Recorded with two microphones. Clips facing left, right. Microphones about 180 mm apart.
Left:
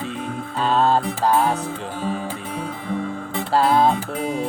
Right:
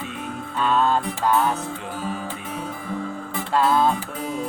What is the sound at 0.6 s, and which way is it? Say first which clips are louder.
Music: left 2 dB; 30° left (ahead or behind).